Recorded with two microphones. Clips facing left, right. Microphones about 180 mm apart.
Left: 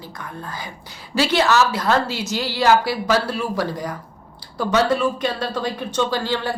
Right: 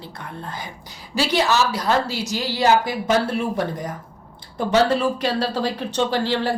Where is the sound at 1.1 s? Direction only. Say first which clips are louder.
Left 2 dB; 15° right (ahead or behind).